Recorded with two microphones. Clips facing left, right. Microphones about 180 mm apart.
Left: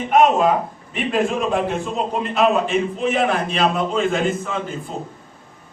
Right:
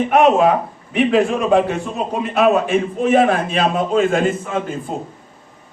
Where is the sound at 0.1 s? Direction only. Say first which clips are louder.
Right 1 dB; 70° right (ahead or behind).